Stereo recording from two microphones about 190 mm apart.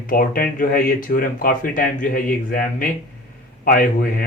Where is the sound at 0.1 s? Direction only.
50° left (ahead or behind).